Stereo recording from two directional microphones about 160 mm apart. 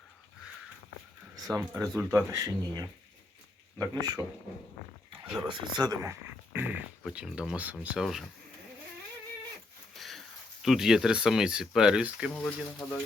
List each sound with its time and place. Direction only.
1.5 s speech: 20° right (ahead or behind)
5.5 s speech: 25° right (ahead or behind); by 8.2 s 5° right (ahead or behind)
10.0 s speech: centre (ahead or behind)
12.3 s speech: 10° left (ahead or behind)